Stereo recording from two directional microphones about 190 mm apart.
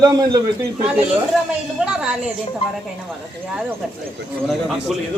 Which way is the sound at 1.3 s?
Centre (ahead or behind).